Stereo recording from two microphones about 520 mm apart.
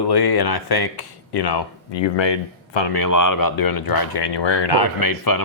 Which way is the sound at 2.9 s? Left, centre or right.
Left.